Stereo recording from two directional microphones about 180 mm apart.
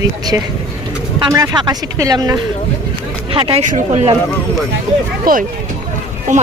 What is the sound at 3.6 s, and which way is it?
Speech, 40° right (ahead or behind).